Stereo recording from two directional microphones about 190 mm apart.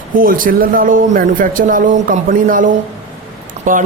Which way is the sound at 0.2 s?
45° right (ahead or behind).